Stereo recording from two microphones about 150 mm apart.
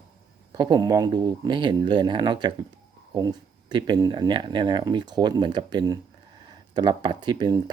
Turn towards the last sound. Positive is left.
turn(degrees=-30)  # may be behind; listen again after turning